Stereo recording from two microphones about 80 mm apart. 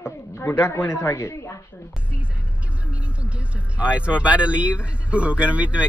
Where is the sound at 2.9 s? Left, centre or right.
Centre.